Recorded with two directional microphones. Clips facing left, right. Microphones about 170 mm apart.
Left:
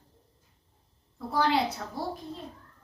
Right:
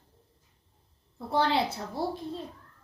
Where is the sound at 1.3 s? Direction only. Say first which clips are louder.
Even; 30° right (ahead or behind).